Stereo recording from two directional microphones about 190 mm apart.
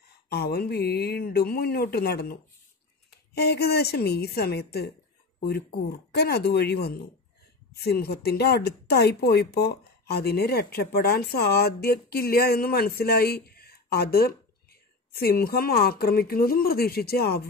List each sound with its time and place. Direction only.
0.3 s speech: 55° left (ahead or behind)
3.3 s speech: 60° left (ahead or behind)